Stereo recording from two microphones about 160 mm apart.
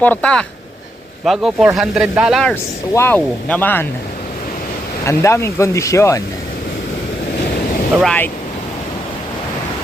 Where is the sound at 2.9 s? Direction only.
15° left (ahead or behind).